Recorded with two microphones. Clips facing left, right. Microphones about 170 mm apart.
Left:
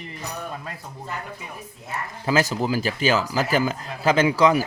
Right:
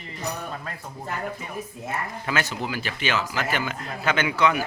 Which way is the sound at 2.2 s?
35° left (ahead or behind).